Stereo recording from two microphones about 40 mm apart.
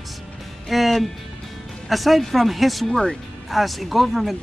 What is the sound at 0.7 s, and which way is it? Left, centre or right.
Music, centre.